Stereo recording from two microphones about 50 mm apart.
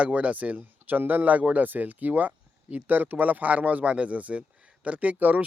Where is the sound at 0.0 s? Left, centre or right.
Right.